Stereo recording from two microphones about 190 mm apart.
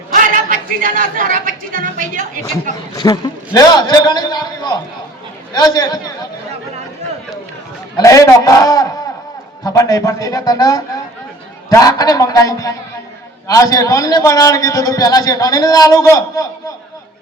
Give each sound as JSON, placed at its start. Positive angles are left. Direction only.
{"t": 0.1, "sound": "a woman's voice", "side_deg": -45}
{"t": 2.9, "sound": "a man's voice", "side_deg": 20}
{"t": 7.9, "sound": "a man's voice", "side_deg": 15}